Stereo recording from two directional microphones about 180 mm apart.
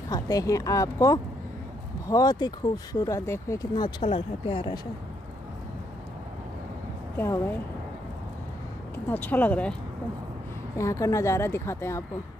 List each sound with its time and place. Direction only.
0.1 s speech: 20° left (ahead or behind)
7.2 s speech: 10° left (ahead or behind)
9.0 s speech: 10° left (ahead or behind)
10.8 s speech: 15° left (ahead or behind)